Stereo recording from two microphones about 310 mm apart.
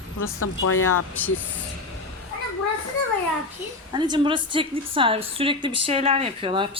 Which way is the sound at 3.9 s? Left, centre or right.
Centre.